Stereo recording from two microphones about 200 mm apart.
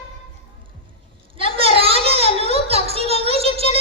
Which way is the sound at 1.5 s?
30° right (ahead or behind).